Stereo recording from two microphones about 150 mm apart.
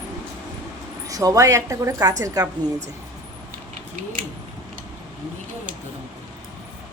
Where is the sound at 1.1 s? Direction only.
25° right (ahead or behind).